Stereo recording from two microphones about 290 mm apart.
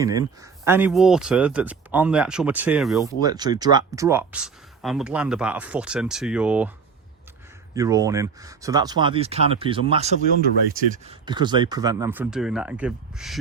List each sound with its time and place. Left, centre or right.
0.0 s speech: centre
3.2 s speech: centre
7.8 s speech: centre